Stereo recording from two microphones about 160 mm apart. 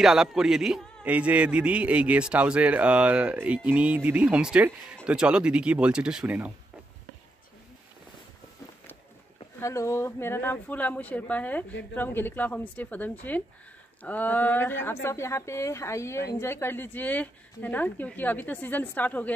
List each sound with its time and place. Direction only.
0.0 s a man's voice: centre (ahead or behind)
9.6 s speech: 15° left (ahead or behind)